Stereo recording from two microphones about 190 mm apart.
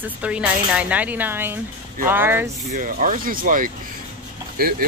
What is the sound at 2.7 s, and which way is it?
Speech, 40° right (ahead or behind).